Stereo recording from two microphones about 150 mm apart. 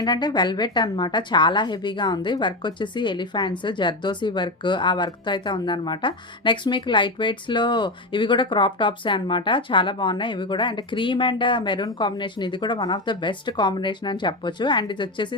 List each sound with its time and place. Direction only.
0.0 s a woman's voice: 30° left (ahead or behind)